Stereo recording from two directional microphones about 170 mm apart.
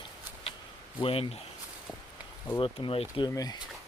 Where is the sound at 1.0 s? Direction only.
35° left (ahead or behind).